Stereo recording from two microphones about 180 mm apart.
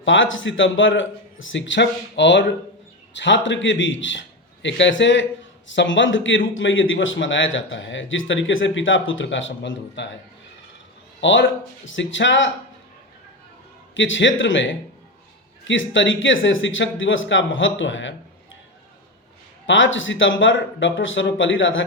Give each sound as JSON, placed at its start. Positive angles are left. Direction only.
{"t": 0.0, "sound": "a man's voice", "side_deg": 90}
{"t": 11.2, "sound": "a man's voice", "side_deg": 90}
{"t": 13.9, "sound": "a man's voice", "side_deg": 90}
{"t": 19.6, "sound": "a man's voice", "side_deg": 90}